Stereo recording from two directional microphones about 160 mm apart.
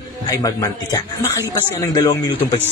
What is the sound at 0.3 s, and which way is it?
Speech, 25° left (ahead or behind).